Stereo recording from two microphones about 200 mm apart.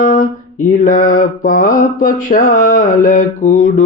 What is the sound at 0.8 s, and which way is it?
Mantra, 40° left (ahead or behind).